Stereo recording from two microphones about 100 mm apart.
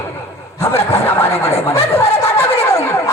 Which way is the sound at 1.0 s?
25° left (ahead or behind).